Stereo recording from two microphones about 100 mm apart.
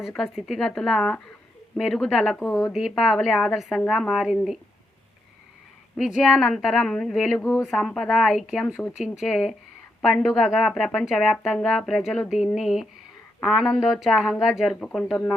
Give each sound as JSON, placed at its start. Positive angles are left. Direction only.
{"t": 0.1, "sound": "speech", "side_deg": 0}
{"t": 2.5, "sound": "speech", "side_deg": 30}
{"t": 2.9, "sound": "speech", "side_deg": 0}
{"t": 6.0, "sound": "speech", "side_deg": -5}
{"t": 7.4, "sound": "speech", "side_deg": 25}
{"t": 7.7, "sound": "speech", "side_deg": 5}